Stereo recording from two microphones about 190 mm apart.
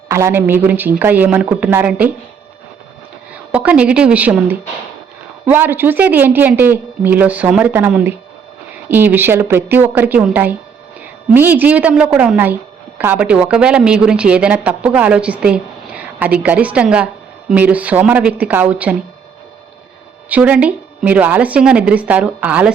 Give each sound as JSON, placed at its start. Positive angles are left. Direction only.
{"t": 0.1, "sound": "a woman's voice", "side_deg": -15}
{"t": 3.5, "sound": "a woman's voice", "side_deg": -5}
{"t": 20.3, "sound": "a woman's voice", "side_deg": -5}